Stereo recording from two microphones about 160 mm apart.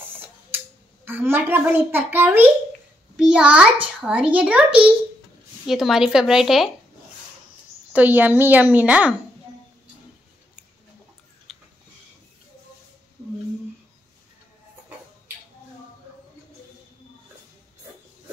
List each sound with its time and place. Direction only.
1.0 s a child's voice: 15° right (ahead or behind)
7.9 s a child's voice: 10° right (ahead or behind)
11.5 s a sound: centre (ahead or behind)